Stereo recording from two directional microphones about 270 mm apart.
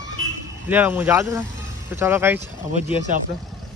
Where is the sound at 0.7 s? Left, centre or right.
Centre.